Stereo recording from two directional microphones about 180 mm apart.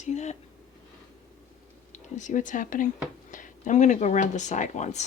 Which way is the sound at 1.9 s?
45° left (ahead or behind).